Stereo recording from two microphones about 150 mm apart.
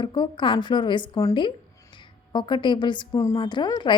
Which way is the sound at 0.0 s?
30° left (ahead or behind).